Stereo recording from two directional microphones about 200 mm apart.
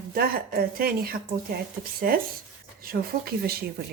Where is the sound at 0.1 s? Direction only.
45° right (ahead or behind).